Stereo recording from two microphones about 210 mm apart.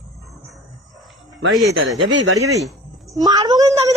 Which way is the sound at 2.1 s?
60° right (ahead or behind).